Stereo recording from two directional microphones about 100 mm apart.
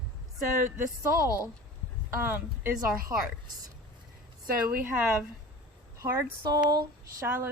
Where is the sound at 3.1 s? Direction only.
35° right (ahead or behind).